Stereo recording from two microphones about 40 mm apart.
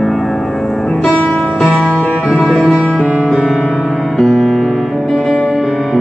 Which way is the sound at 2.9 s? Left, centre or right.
Right.